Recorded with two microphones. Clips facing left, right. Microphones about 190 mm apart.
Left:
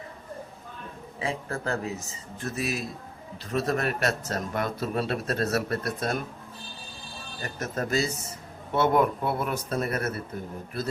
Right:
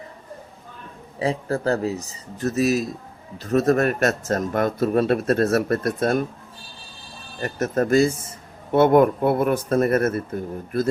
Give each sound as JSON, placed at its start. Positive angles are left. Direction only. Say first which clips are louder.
{"t": 1.2, "sound": "speech", "louder": "right 8 dB", "side_deg": -35}
{"t": 7.4, "sound": "speech", "louder": "right 9 dB", "side_deg": -50}